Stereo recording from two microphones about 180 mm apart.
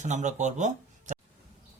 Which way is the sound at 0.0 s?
40° right (ahead or behind).